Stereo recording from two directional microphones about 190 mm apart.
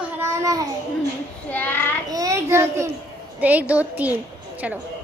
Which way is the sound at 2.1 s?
20° right (ahead or behind).